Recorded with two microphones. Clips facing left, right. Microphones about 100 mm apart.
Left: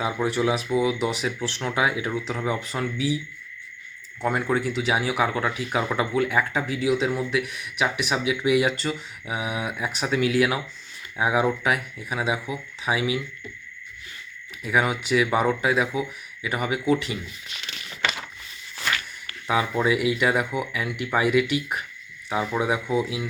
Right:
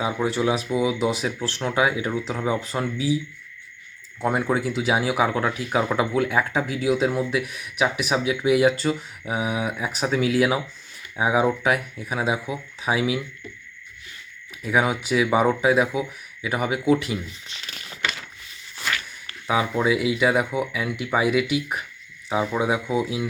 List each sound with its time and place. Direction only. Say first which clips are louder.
0.0 s speech: right 1 dB; centre (ahead or behind)
4.2 s speech: right 1 dB; 5° right (ahead or behind)
14.6 s speech: right 1 dB; 5° right (ahead or behind)
17.5 s a sound: left 1 dB; 40° right (ahead or behind)
19.5 s speech: right 1 dB; 5° right (ahead or behind)